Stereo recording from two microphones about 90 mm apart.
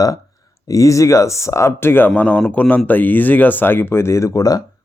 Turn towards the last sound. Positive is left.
turn(degrees=40)  # may be behind; listen again after turning